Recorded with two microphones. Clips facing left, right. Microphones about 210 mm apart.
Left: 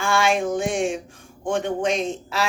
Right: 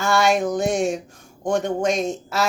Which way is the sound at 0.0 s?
40° right (ahead or behind).